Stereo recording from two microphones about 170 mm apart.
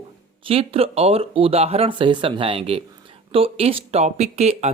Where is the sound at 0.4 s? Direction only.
35° right (ahead or behind).